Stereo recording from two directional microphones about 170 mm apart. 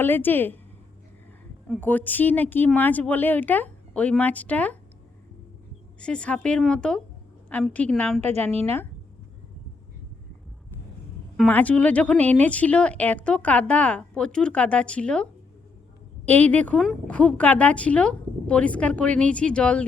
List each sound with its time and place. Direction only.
0.0 s speech: 10° left (ahead or behind)
1.6 s speech: 10° left (ahead or behind)
6.0 s a woman's voice: 5° left (ahead or behind)
8.2 s a woman's voice: 40° right (ahead or behind)
11.3 s speech: 10° left (ahead or behind)